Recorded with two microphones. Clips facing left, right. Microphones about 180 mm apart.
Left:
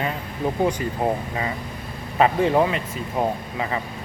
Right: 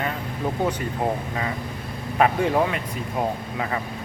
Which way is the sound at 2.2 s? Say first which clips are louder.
Left 2 dB; 5° left (ahead or behind).